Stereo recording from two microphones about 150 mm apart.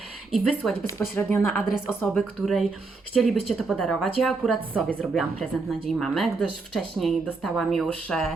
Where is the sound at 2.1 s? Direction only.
Centre (ahead or behind).